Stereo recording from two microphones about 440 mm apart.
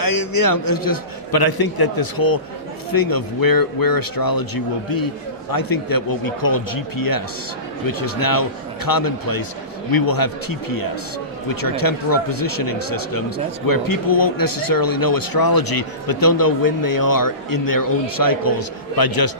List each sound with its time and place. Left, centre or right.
0.0 s speech: left